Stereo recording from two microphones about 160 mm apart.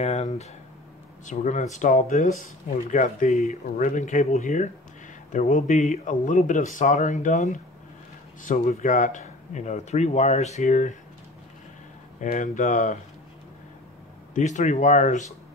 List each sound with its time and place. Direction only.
0.0 s speech: 45° left (ahead or behind)
12.2 s speech: 50° left (ahead or behind)
14.3 s speech: 50° left (ahead or behind)